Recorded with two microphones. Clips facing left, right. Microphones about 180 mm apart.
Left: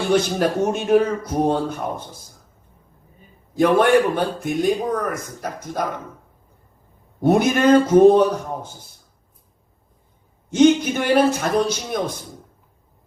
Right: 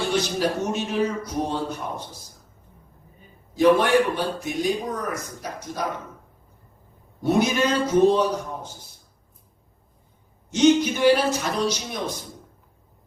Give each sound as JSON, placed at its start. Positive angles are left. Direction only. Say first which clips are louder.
{"t": 0.1, "sound": "a man's voice", "louder": "left 8 dB", "side_deg": 55}
{"t": 3.5, "sound": "a man's voice", "louder": "left 2 dB", "side_deg": 50}
{"t": 7.2, "sound": "a man's voice", "louder": "left 4 dB", "side_deg": 50}
{"t": 10.5, "sound": "a man's voice", "louder": "left 3 dB", "side_deg": 55}